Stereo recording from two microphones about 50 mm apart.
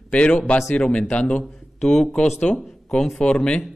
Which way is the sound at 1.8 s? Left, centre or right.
Centre.